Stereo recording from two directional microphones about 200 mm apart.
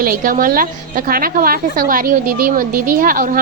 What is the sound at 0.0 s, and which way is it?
A woman's voice, 45° right (ahead or behind).